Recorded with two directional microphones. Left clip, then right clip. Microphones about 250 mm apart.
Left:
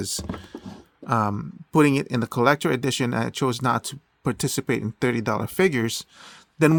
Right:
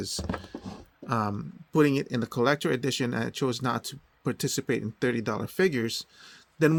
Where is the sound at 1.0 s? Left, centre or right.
Left.